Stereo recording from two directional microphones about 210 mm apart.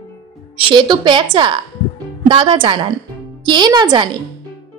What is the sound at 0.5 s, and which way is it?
A woman's voice, 25° right (ahead or behind).